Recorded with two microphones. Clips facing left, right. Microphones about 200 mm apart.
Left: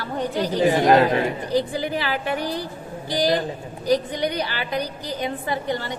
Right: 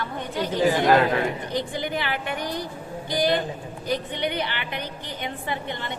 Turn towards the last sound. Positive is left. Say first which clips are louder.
# left 5 dB
turn(degrees=40)  # may be behind; listen again after turning